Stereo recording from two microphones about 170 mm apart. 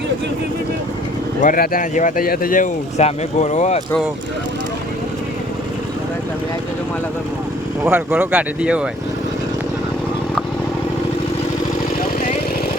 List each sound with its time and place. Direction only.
1.4 s speech: 55° left (ahead or behind)
7.9 s speech: 10° right (ahead or behind)